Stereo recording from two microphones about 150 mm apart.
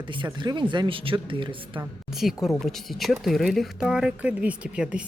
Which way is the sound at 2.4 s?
Centre (ahead or behind).